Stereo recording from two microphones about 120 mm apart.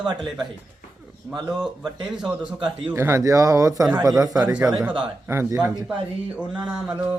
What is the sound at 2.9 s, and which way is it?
Speech, 20° right (ahead or behind).